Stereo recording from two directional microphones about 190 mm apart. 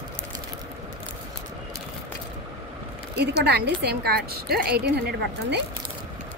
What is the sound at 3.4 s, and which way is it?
A woman's voice, 60° right (ahead or behind).